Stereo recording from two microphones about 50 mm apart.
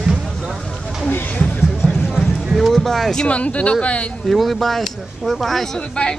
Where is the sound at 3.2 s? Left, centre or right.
Left.